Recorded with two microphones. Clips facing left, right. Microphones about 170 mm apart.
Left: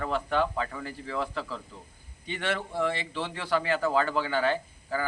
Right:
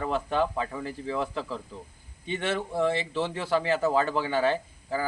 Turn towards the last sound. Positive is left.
turn(degrees=-25)  # may be behind; listen again after turning